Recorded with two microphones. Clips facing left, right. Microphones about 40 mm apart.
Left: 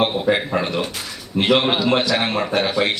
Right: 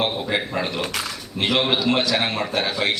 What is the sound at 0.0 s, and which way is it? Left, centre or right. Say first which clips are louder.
A man's voice: left 5 dB; centre.